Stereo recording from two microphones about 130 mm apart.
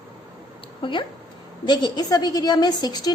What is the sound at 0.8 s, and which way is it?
A woman's voice, 40° left (ahead or behind).